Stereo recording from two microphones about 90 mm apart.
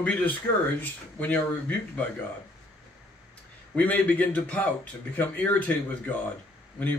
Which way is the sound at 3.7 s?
15° left (ahead or behind).